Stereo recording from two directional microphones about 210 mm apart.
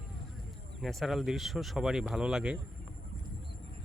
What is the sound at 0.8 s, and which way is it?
A man's voice, centre (ahead or behind).